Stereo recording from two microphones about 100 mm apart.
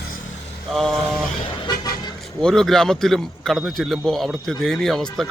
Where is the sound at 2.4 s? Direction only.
5° left (ahead or behind).